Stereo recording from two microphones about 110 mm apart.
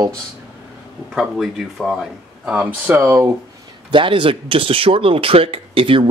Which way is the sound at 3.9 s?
50° right (ahead or behind).